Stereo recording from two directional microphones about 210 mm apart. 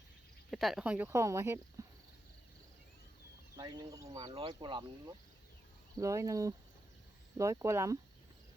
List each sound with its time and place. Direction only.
0.5 s speech: centre (ahead or behind)
1.8 s a sound: 15° right (ahead or behind)
3.6 s speech: 15° right (ahead or behind)
4.3 s speech: 25° right (ahead or behind)